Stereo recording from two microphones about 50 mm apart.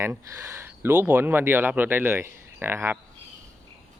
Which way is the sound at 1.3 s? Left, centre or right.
Right.